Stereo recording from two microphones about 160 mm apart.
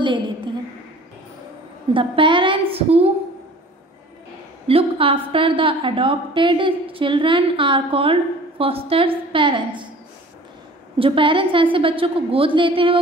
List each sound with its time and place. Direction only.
2.0 s a woman's voice: 30° right (ahead or behind)
4.6 s a woman's voice: 35° right (ahead or behind)
11.0 s a woman's voice: 35° right (ahead or behind)